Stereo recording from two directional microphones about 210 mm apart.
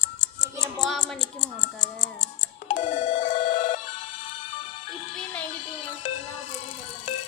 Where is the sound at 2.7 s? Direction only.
35° left (ahead or behind).